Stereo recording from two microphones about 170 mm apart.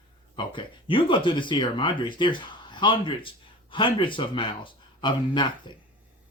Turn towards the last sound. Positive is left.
turn(degrees=25)  # may be behind; listen again after turning